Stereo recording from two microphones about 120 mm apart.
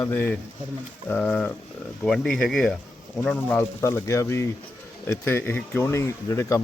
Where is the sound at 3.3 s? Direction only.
15° left (ahead or behind).